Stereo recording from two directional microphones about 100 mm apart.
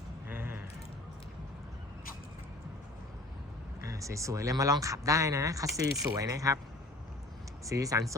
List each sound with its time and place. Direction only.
0.3 s a sound: 20° right (ahead or behind)
3.8 s speech: 30° right (ahead or behind)
7.6 s speech: 35° right (ahead or behind)